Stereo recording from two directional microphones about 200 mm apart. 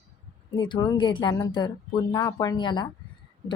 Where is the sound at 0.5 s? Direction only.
20° left (ahead or behind).